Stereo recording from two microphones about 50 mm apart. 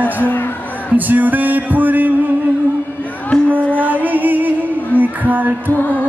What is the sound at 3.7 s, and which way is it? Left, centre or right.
Music, right.